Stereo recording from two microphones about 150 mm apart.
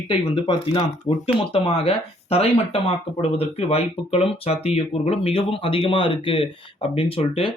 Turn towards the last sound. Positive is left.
turn(degrees=40)  # may be behind; listen again after turning